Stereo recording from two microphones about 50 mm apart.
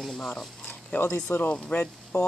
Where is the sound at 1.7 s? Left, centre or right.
Left.